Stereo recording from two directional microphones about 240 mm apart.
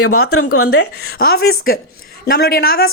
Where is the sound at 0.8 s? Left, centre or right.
Left.